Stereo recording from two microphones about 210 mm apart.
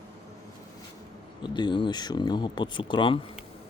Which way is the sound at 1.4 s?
20° left (ahead or behind).